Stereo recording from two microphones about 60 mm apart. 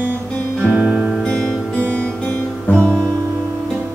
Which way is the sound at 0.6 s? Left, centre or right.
Right.